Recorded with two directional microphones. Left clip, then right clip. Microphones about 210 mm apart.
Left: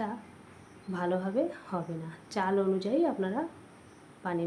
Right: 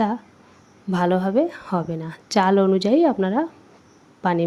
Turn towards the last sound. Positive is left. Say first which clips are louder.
# right 12 dB
turn(degrees=-50)  # may be behind; listen again after turning